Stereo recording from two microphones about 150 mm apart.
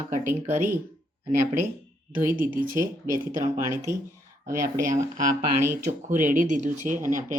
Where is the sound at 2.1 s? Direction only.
65° right (ahead or behind).